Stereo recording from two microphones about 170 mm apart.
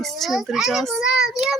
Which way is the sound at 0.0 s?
Centre (ahead or behind).